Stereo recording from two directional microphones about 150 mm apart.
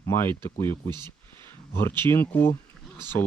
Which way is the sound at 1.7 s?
15° left (ahead or behind).